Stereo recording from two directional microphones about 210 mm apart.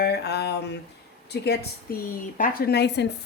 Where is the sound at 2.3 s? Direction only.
40° left (ahead or behind).